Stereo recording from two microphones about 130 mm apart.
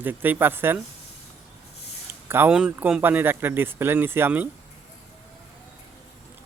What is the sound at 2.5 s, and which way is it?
Speech, 5° right (ahead or behind).